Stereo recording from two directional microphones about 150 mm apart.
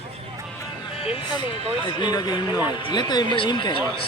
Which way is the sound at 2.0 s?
30° left (ahead or behind).